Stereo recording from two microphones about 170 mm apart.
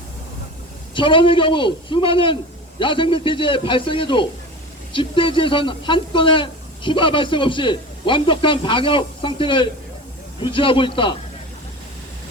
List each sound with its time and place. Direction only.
0.9 s speech: 30° left (ahead or behind)